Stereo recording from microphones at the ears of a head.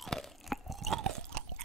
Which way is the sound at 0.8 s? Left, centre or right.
Right.